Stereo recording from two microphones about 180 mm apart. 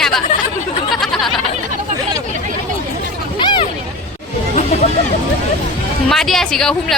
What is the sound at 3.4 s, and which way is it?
Hubbub, 25° left (ahead or behind).